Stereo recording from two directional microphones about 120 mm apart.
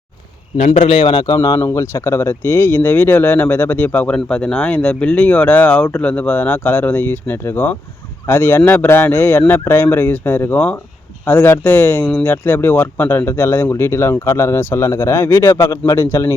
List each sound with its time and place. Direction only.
0.5 s a man's voice: 70° left (ahead or behind)
0.9 s speech: 45° left (ahead or behind); by 16.3 s 25° left (ahead or behind)